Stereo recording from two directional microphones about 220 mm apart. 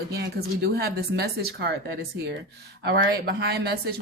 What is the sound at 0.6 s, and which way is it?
Speech, 45° right (ahead or behind).